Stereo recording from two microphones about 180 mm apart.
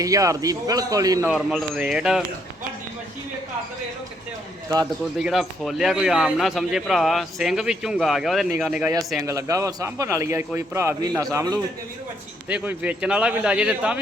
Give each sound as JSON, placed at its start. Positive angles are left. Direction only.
{"t": 0.0, "sound": "a man's voice", "side_deg": -20}
{"t": 1.3, "sound": "a man's voice", "side_deg": 0}
{"t": 5.2, "sound": "a man's voice", "side_deg": 0}
{"t": 9.2, "sound": "a man's voice", "side_deg": -20}
{"t": 12.5, "sound": "a man's voice", "side_deg": -10}